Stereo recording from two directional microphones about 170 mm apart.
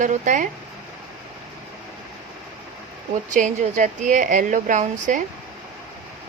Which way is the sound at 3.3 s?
45° right (ahead or behind).